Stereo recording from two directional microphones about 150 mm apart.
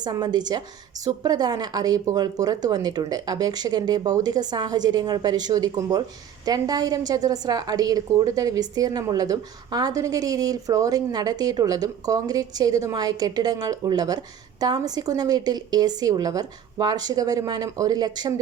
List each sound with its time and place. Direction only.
0.0 s a woman's voice: 30° right (ahead or behind)